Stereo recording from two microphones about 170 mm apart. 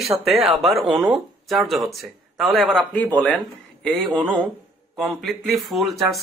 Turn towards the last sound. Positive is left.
turn(degrees=0)  # may be behind; listen again after turning